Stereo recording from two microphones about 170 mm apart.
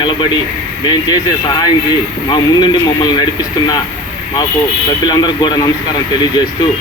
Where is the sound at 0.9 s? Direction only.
25° left (ahead or behind).